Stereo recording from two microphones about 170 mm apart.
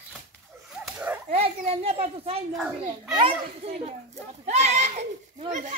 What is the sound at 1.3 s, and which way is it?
A child's voice, 35° right (ahead or behind).